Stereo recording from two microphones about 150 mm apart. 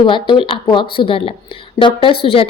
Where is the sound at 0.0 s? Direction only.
30° left (ahead or behind).